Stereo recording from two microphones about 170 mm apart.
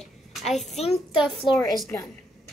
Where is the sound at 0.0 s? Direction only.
Centre (ahead or behind).